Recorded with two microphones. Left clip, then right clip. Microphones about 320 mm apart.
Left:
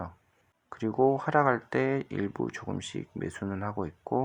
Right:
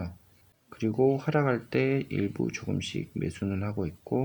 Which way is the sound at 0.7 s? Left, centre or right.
Centre.